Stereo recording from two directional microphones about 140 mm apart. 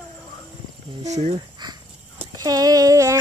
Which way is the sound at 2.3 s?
25° right (ahead or behind).